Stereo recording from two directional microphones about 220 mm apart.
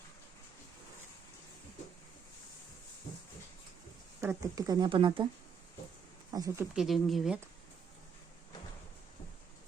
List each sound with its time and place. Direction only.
4.2 s speech: 15° right (ahead or behind)
6.3 s speech: 15° right (ahead or behind)
6.7 s speech: centre (ahead or behind)